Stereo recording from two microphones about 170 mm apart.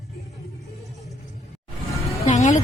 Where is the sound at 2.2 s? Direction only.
40° left (ahead or behind).